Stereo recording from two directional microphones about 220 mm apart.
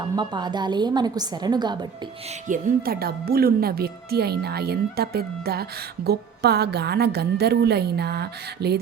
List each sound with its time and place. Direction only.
0.0 s a woman's voice: 20° right (ahead or behind)
2.5 s speech: 40° right (ahead or behind)